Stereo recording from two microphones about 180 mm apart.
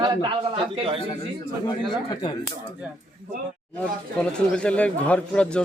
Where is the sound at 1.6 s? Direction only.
25° left (ahead or behind).